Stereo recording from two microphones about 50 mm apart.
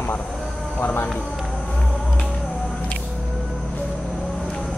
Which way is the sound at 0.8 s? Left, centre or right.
Left.